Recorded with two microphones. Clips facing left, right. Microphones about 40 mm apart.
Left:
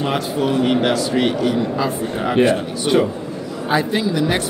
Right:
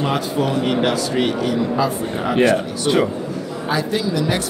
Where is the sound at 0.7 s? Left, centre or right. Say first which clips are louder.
Left 1 dB; centre.